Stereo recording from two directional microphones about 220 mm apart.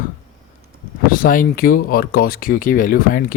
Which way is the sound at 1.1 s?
40° left (ahead or behind).